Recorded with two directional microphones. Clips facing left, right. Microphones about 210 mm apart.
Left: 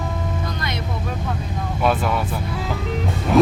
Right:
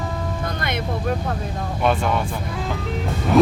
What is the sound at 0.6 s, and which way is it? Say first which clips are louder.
Vehicle: right 2 dB; 55° right (ahead or behind).